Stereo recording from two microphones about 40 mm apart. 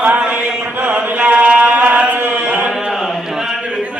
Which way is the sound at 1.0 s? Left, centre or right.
Right.